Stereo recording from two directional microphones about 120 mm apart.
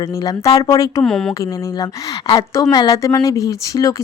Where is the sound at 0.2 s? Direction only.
30° left (ahead or behind).